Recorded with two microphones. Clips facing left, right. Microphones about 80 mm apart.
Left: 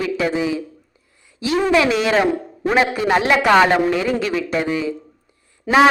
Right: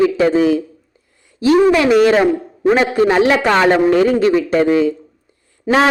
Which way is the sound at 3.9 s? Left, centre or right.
Right.